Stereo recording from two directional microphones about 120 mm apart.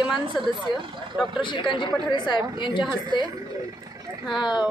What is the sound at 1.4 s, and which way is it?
A woman's voice, 45° left (ahead or behind).